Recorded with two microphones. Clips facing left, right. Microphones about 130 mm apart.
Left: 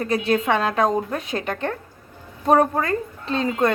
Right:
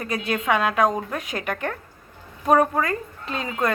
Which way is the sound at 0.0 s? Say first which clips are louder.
Left 5 dB; 30° left (ahead or behind).